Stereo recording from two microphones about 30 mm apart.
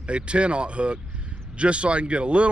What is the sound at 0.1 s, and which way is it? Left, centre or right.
Speech, right.